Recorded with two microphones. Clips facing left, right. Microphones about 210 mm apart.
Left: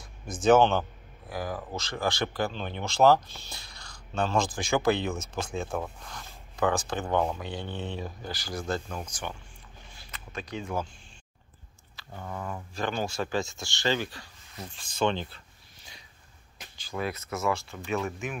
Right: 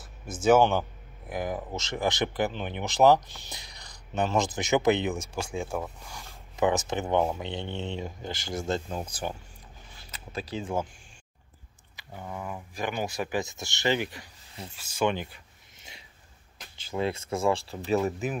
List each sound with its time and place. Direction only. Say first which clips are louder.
0.0 s speech: even; 5° right (ahead or behind); by 9.0 s 25° right (ahead or behind)
9.1 s speech: right 4 dB; 35° right (ahead or behind)
12.0 s speech: even; 15° right (ahead or behind)
14.8 s a sound: even; 10° right (ahead or behind)
16.7 s speech: right 3 dB; 25° right (ahead or behind)